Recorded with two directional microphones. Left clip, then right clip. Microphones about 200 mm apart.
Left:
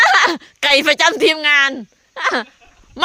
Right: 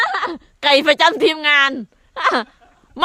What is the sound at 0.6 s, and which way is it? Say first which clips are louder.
A woman's voice: even; 5° right (ahead or behind).